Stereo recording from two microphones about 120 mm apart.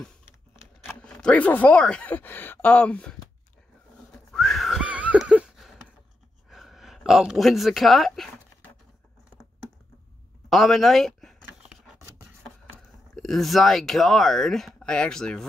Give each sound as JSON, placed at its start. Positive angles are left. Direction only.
{"t": 0.8, "sound": "speech", "side_deg": 10}
{"t": 4.3, "sound": "whistling", "side_deg": 5}
{"t": 6.5, "sound": "speech", "side_deg": 0}
{"t": 10.5, "sound": "speech", "side_deg": 0}
{"t": 11.6, "sound": "a sound", "side_deg": -5}
{"t": 12.0, "sound": "rub", "side_deg": -20}
{"t": 13.1, "sound": "speech", "side_deg": 0}